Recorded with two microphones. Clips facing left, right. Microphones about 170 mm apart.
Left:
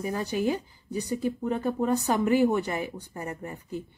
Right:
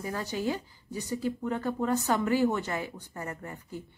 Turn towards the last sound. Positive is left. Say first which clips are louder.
# left 5 dB
turn(degrees=15)  # may be behind; listen again after turning